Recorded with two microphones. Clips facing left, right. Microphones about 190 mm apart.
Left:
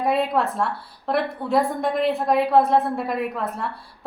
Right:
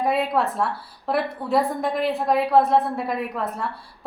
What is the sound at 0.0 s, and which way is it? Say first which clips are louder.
A woman's voice: left 1 dB; centre (ahead or behind).